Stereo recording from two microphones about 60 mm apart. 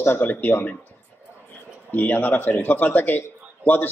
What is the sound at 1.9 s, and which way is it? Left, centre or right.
A man's voice, left.